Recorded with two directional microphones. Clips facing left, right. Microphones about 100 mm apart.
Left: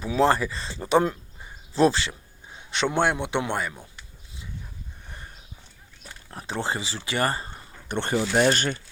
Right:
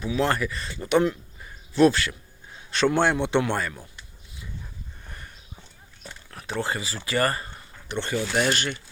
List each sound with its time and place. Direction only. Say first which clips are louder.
0.0 s a man's voice: left 3 dB; 35° left (ahead or behind); by 3.8 s 15° left (ahead or behind)
6.3 s speech: even; 30° left (ahead or behind)
7.9 s speech: left 2 dB; 50° left (ahead or behind)
8.1 s speech: left 3 dB; 30° left (ahead or behind)